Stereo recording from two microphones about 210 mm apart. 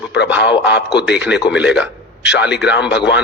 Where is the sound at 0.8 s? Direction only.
55° left (ahead or behind).